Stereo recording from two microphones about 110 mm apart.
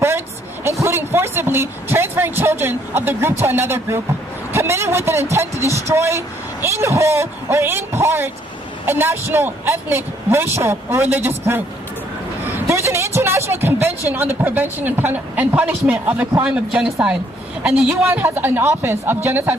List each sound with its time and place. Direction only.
0.8 s speech: 20° right (ahead or behind)